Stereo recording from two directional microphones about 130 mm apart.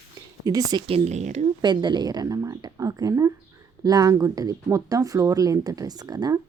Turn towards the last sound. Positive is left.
turn(degrees=-30)  # may be behind; listen again after turning